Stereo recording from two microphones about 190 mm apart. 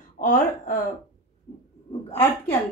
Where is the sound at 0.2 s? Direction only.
40° left (ahead or behind).